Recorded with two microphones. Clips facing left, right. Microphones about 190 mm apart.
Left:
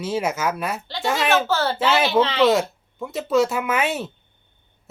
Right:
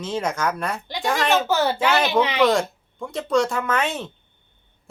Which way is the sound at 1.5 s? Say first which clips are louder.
Right 1 dB; 15° right (ahead or behind).